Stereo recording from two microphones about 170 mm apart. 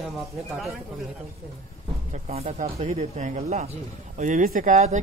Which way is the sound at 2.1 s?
35° right (ahead or behind).